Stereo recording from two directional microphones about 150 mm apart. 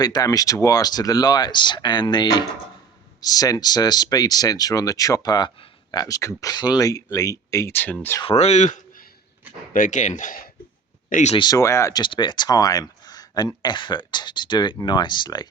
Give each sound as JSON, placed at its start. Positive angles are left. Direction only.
{"t": 0.0, "sound": "speech", "side_deg": 25}
{"t": 8.2, "sound": "speech", "side_deg": 40}
{"t": 11.1, "sound": "speech", "side_deg": 50}
{"t": 11.3, "sound": "speech", "side_deg": 25}